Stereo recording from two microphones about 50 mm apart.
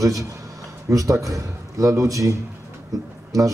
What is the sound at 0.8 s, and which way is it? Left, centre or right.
A man's voice, right.